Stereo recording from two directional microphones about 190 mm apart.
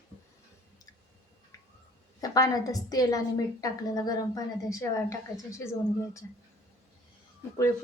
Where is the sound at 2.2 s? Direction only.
20° left (ahead or behind).